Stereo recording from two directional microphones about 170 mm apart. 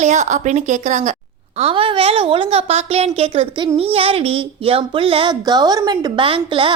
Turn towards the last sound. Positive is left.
turn(degrees=-30)  # may be behind; listen again after turning